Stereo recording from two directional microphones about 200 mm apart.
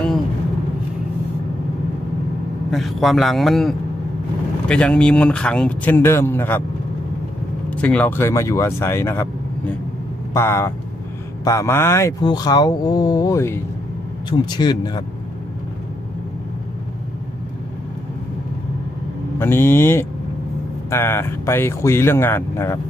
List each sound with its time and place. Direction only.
2.7 s a man's voice: centre (ahead or behind)
7.7 s speech: 5° left (ahead or behind)
10.3 s speech: 15° left (ahead or behind)
19.3 s speech: 10° left (ahead or behind)